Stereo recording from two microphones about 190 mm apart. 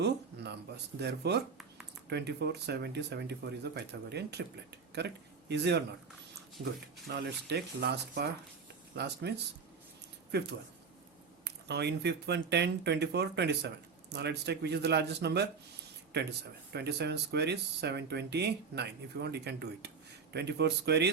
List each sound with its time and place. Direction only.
0.0 s a sound: 60° right (ahead or behind)
0.9 s a man's voice: 60° right (ahead or behind)
7.1 s speech: 60° right (ahead or behind)
10.3 s speech: 60° right (ahead or behind)
16.7 s speech: 60° right (ahead or behind)